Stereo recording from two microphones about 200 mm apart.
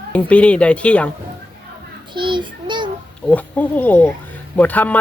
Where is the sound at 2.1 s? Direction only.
25° right (ahead or behind).